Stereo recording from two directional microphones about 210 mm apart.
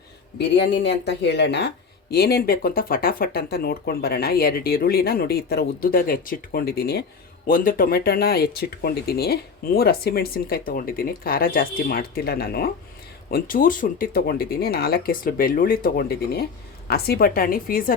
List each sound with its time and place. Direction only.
0.3 s speech: 55° left (ahead or behind)